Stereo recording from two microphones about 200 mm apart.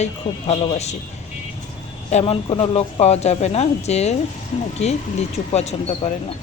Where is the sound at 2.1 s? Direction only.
30° left (ahead or behind).